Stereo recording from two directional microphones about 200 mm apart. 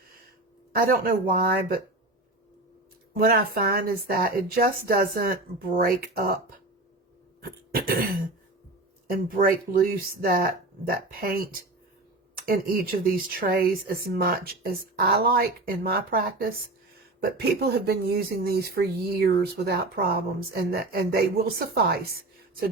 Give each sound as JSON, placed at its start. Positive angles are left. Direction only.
{"t": 0.7, "sound": "speech", "side_deg": -45}
{"t": 3.2, "sound": "speech", "side_deg": -50}
{"t": 7.4, "sound": "cough", "side_deg": -45}
{"t": 9.0, "sound": "speech", "side_deg": -45}